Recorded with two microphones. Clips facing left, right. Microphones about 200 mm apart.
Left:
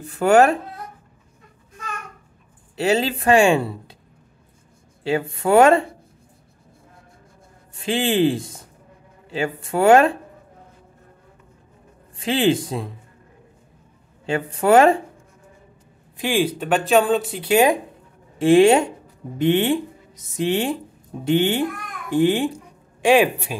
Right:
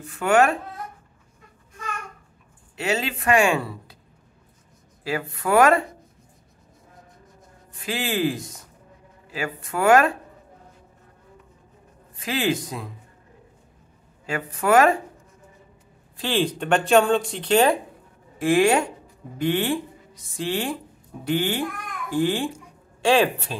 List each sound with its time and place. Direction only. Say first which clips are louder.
0.0 s speech: left 4 dB; 35° left (ahead or behind)
2.7 s speech: left 6 dB; 35° left (ahead or behind)
5.0 s speech: left 5 dB; 25° left (ahead or behind)
7.7 s speech: left 6 dB; 25° left (ahead or behind)
12.2 s speech: left 6 dB; 25° left (ahead or behind)
14.2 s speech: left 5 dB; 30° left (ahead or behind)
16.2 s speech: left 3 dB; 10° left (ahead or behind)
18.4 s speech: left 6 dB; 25° left (ahead or behind)